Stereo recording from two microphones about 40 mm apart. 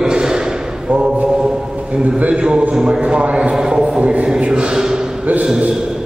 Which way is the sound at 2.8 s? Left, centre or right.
Right.